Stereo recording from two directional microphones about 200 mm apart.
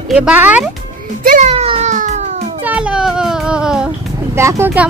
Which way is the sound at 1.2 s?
40° right (ahead or behind).